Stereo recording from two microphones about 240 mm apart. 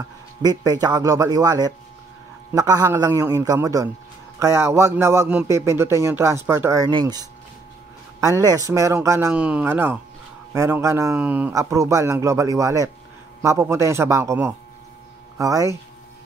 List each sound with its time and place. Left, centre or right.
0.4 s a man's voice: centre